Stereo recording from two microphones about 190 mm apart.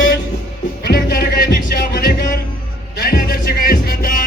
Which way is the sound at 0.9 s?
55° left (ahead or behind).